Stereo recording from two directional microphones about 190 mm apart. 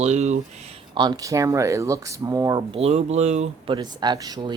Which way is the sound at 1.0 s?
20° right (ahead or behind).